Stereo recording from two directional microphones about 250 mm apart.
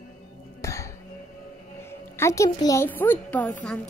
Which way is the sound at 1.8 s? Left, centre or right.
Centre.